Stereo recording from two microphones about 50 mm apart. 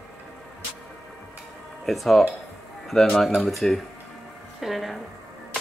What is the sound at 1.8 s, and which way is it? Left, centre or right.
Speech, centre.